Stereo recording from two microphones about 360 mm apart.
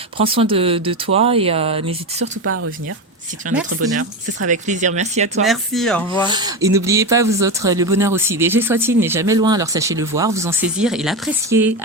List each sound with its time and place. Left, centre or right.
0.2 s speech: centre
2.2 s speech: right
4.4 s speech: centre
5.5 s speech: centre
6.2 s speech: centre